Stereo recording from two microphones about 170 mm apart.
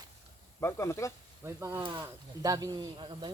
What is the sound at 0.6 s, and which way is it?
Speech, 15° left (ahead or behind).